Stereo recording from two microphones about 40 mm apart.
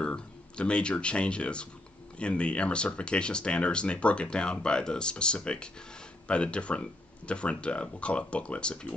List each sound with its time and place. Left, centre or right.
0.0 s speech: left